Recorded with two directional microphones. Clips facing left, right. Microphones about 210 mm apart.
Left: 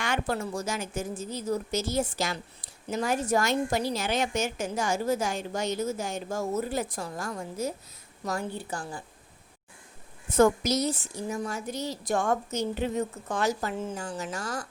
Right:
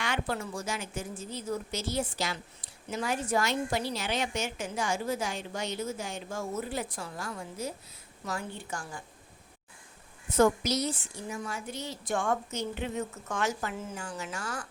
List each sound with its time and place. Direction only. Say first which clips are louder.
0.0 s a woman's voice: left 3 dB; 45° left (ahead or behind)
10.3 s a woman's voice: left 3 dB; 45° left (ahead or behind)